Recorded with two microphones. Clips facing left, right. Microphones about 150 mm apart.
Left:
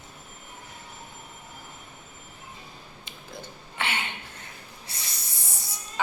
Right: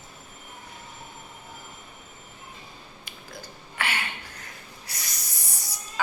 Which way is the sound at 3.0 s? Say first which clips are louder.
Left 2 dB; 25° left (ahead or behind).